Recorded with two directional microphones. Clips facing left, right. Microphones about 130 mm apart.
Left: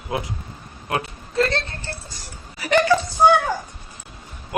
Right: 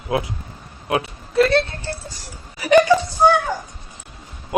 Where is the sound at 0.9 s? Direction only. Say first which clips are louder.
Right 4 dB; 10° right (ahead or behind).